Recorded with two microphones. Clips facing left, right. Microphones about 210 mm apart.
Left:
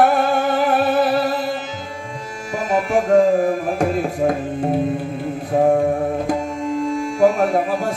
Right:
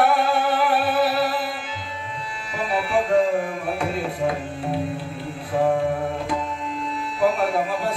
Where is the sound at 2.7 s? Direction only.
45° left (ahead or behind).